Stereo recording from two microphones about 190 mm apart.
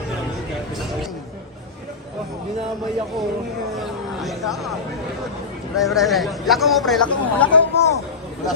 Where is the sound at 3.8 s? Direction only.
Centre (ahead or behind).